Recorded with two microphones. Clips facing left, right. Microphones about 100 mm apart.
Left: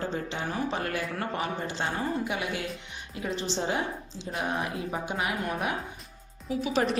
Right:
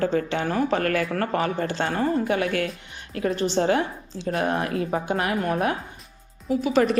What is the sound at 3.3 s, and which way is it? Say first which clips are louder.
A woman's voice: right 8 dB; 55° right (ahead or behind).